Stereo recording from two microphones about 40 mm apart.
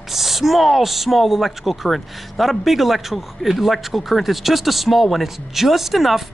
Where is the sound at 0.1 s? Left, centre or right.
Centre.